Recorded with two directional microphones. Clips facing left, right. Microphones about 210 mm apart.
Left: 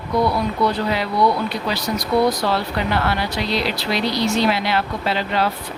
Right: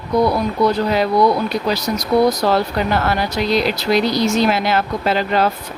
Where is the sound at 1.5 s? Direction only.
40° right (ahead or behind).